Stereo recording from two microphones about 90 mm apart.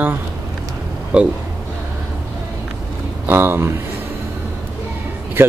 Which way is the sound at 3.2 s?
25° right (ahead or behind).